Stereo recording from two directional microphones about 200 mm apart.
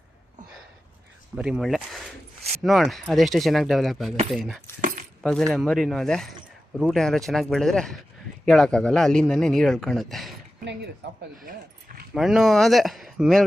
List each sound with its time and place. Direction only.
1.4 s speech: 5° right (ahead or behind)
10.7 s a sound: 60° right (ahead or behind)
12.1 s speech: centre (ahead or behind)